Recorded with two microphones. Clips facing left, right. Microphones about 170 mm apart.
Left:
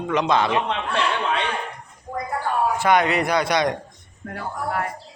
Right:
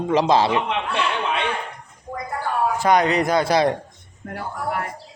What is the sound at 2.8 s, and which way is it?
Speech, 40° right (ahead or behind).